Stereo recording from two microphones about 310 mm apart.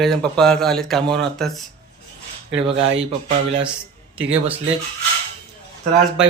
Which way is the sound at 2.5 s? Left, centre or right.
Centre.